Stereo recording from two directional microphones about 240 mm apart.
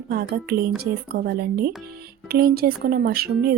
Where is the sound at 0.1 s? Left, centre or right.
Right.